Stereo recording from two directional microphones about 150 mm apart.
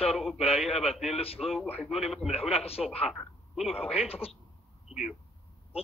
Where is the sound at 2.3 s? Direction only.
40° left (ahead or behind).